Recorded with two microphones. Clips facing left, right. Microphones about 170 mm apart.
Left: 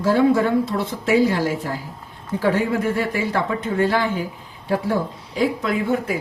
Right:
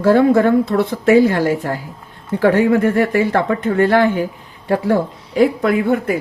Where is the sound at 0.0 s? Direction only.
60° right (ahead or behind).